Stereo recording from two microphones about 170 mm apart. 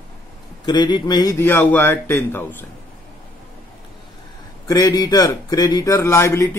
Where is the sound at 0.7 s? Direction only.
25° left (ahead or behind).